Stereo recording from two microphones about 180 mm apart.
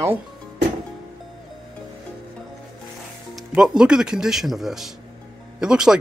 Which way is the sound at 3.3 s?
5° right (ahead or behind).